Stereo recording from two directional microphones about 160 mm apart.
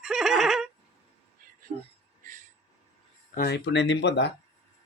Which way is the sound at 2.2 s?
55° right (ahead or behind).